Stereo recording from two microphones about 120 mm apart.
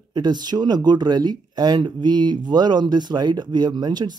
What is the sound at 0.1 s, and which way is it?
Speech, 35° right (ahead or behind).